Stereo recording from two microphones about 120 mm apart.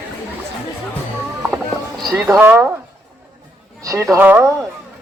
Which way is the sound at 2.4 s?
20° right (ahead or behind).